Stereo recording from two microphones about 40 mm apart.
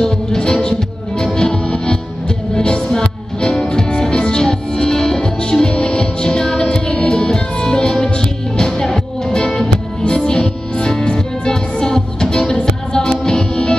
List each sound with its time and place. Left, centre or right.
0.0 s music: centre